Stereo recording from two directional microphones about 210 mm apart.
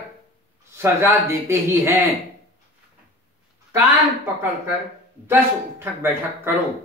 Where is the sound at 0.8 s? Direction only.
10° right (ahead or behind).